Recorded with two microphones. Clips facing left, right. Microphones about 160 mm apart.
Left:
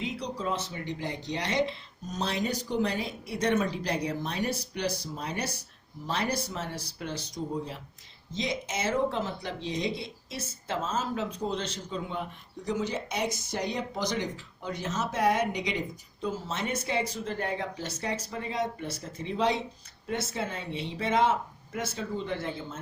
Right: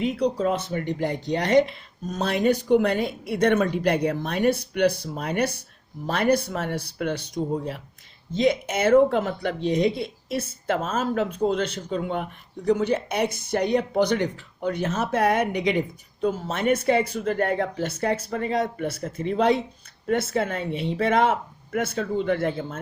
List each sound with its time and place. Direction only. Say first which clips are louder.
0.0 s speech: right 10 dB; 55° right (ahead or behind)